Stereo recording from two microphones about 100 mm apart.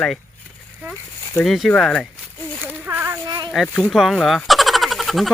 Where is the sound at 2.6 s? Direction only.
15° right (ahead or behind).